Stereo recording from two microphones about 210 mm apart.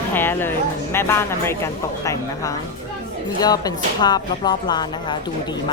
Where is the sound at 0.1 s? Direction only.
10° left (ahead or behind).